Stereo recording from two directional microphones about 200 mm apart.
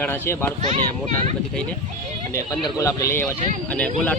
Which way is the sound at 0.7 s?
35° right (ahead or behind).